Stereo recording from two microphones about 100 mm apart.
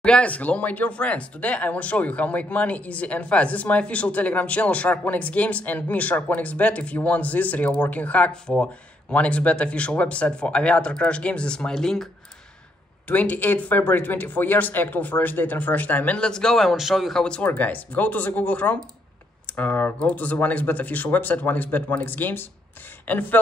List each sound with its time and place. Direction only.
0.0 s speech: 10° left (ahead or behind)
13.1 s speech: 15° left (ahead or behind)